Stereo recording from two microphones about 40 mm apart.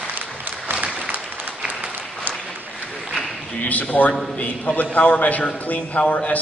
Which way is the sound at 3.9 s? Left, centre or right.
Left.